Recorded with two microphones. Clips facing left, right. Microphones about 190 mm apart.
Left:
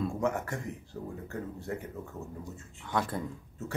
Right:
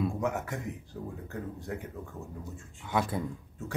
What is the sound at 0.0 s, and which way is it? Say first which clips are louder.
Speech: even; centre (ahead or behind).